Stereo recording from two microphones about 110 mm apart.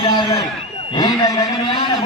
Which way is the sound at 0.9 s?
35° left (ahead or behind).